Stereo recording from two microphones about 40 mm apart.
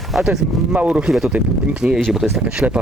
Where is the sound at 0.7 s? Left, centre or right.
Right.